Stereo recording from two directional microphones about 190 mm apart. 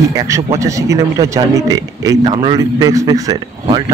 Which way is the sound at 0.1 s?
15° right (ahead or behind).